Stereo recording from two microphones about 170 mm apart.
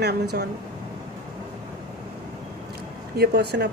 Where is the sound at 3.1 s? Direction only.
80° right.